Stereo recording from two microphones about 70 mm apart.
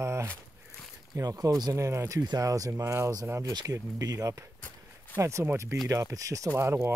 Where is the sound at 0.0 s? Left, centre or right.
Right.